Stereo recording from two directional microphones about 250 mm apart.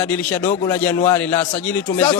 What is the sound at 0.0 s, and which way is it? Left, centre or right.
Chopping, centre.